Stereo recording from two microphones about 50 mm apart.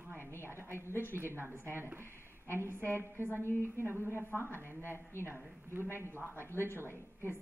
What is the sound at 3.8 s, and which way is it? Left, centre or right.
Speech, right.